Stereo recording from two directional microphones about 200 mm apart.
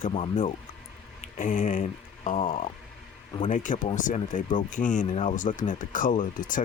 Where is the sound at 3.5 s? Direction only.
40° left (ahead or behind).